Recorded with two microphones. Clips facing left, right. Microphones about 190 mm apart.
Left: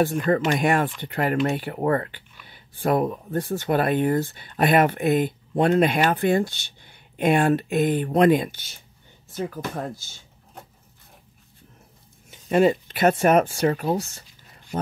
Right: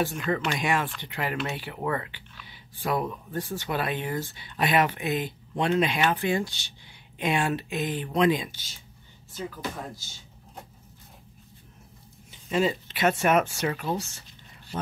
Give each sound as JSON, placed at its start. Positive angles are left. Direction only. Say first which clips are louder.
{"t": 0.0, "sound": "speech", "louder": "left 6 dB", "side_deg": 50}
{"t": 12.3, "sound": "a sound", "louder": "left 7 dB", "side_deg": 55}
{"t": 13.2, "sound": "speech", "louder": "left 5 dB", "side_deg": 40}